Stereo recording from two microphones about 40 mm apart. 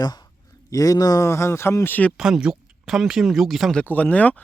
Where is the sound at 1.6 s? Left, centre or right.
Left.